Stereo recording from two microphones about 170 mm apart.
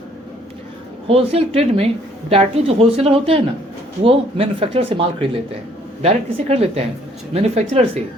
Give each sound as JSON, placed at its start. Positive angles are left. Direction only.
{"t": 1.0, "sound": "speech", "side_deg": -35}